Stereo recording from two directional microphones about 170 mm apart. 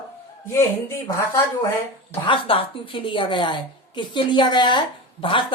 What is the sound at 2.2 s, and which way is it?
A woman's voice, 30° left (ahead or behind).